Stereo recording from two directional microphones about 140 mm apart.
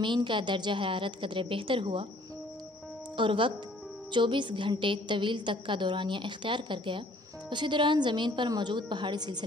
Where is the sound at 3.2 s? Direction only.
35° right (ahead or behind).